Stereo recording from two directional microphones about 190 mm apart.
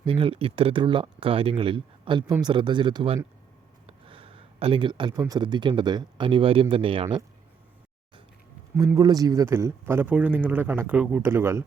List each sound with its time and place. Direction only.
0.1 s speech: 30° right (ahead or behind)
3.8 s a sound: 30° right (ahead or behind)
5.2 s speech: 20° right (ahead or behind)
8.7 s a man's voice: 15° right (ahead or behind)